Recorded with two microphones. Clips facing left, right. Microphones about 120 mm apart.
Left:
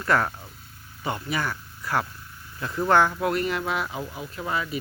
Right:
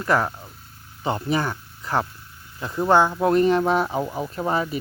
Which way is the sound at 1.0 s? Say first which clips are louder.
Right 5 dB; 30° right (ahead or behind).